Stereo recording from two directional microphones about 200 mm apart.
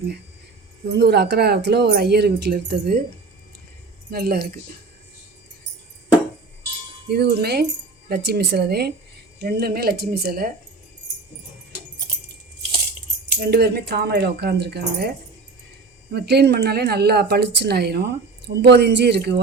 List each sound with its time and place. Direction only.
0.9 s speech: 55° right (ahead or behind)
4.1 s speech: 50° right (ahead or behind)
7.1 s speech: 55° right (ahead or behind)
13.4 s speech: 55° right (ahead or behind)
16.1 s speech: 55° right (ahead or behind)